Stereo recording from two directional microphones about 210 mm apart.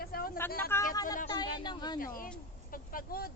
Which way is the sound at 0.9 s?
15° left (ahead or behind).